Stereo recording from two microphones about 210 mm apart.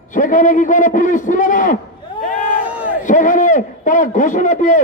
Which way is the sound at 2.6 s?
5° right (ahead or behind).